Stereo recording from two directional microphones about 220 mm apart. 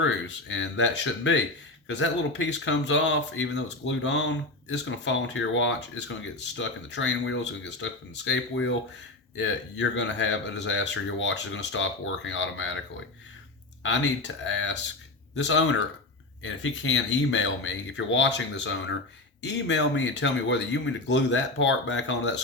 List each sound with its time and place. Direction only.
0.0 s speech: 55° left (ahead or behind)
14.4 s speech: 55° left (ahead or behind)